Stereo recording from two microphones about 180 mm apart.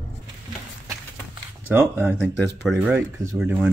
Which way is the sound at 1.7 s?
10° right (ahead or behind).